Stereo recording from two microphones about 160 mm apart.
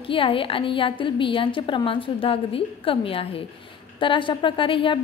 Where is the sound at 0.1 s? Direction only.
35° left (ahead or behind).